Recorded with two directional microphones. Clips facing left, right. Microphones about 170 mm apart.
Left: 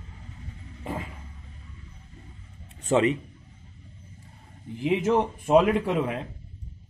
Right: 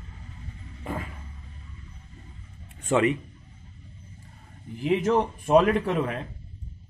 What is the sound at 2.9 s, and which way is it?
Speech, 30° left (ahead or behind).